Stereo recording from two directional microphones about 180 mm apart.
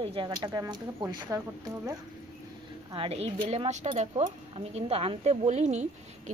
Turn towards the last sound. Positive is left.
turn(degrees=-40)  # may be behind; listen again after turning